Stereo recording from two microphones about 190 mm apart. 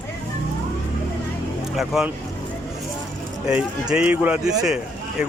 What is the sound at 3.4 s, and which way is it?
A man's voice, 5° right (ahead or behind).